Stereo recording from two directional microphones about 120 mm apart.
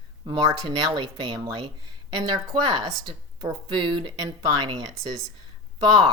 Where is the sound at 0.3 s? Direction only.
35° right (ahead or behind).